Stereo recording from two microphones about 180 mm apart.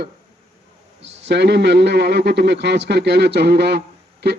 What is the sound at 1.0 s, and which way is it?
A man's voice, 80° right.